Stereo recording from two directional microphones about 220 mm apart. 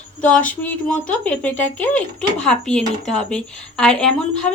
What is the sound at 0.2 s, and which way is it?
Speech, 5° left (ahead or behind).